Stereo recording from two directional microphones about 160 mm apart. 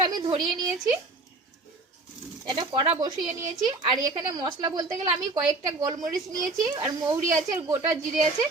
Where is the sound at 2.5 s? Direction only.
30° right (ahead or behind).